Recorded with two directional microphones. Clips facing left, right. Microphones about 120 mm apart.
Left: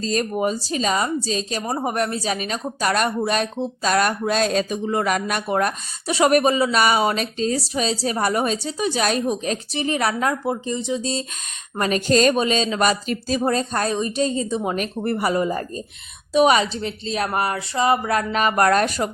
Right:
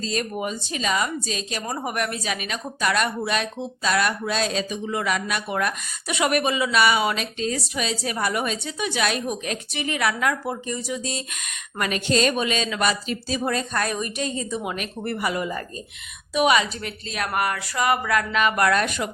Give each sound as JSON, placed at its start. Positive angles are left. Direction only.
{"t": 0.0, "sound": "speech", "side_deg": 40}
{"t": 11.8, "sound": "speech", "side_deg": 40}